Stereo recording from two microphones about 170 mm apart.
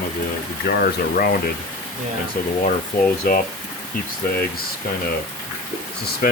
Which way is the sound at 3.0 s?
55° left (ahead or behind).